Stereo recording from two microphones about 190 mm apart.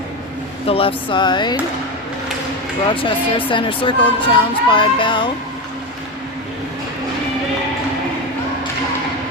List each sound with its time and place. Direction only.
0.7 s speech: 30° left (ahead or behind)
2.9 s speech: 25° left (ahead or behind)